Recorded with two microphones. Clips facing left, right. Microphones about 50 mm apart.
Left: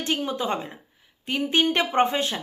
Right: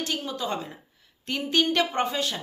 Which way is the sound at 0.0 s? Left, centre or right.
Left.